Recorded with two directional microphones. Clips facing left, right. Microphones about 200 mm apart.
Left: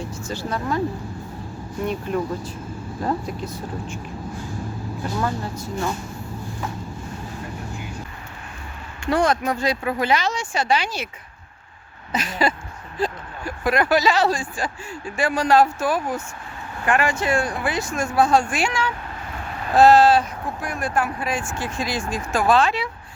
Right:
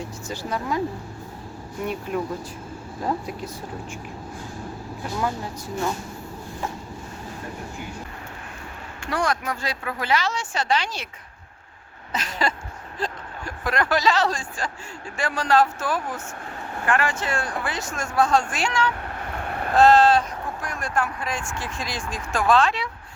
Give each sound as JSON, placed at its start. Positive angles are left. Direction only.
{"t": 0.3, "sound": "speech", "side_deg": -15}
{"t": 3.0, "sound": "speech", "side_deg": -10}
{"t": 5.2, "sound": "speech", "side_deg": -10}
{"t": 9.0, "sound": "speech", "side_deg": 25}
{"t": 12.1, "sound": "speech", "side_deg": 10}
{"t": 19.2, "sound": "vehicle", "side_deg": -60}
{"t": 19.7, "sound": "speech", "side_deg": 5}